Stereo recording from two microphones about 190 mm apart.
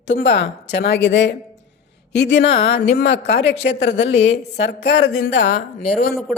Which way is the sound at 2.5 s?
30° left (ahead or behind).